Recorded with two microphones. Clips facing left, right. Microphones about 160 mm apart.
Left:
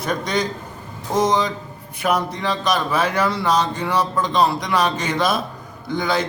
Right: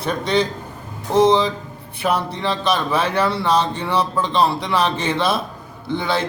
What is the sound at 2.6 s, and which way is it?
Music, 30° right (ahead or behind).